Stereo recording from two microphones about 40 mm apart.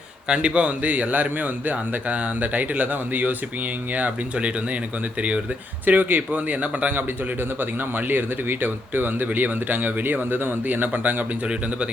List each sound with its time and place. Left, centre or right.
0.3 s speech: right
3.9 s speech: right
5.8 s speech: right
7.6 s speech: right